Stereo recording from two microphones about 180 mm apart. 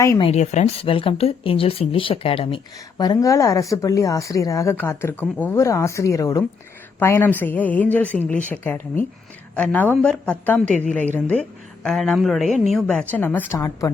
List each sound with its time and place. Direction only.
0.2 s speech: 35° left (ahead or behind)
3.0 s a woman's voice: 20° left (ahead or behind)